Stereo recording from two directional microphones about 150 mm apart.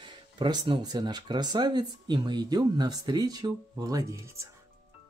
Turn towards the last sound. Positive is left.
turn(degrees=-20)  # may be behind; listen again after turning